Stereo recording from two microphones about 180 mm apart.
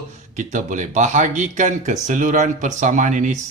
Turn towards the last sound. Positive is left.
turn(degrees=-45)  # may be behind; listen again after turning